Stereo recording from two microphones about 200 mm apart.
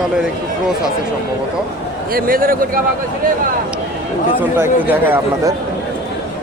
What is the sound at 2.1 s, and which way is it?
Speech, 45° right (ahead or behind).